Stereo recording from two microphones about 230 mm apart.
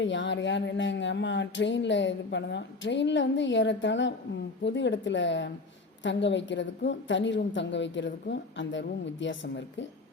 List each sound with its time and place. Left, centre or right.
0.0 s speech: left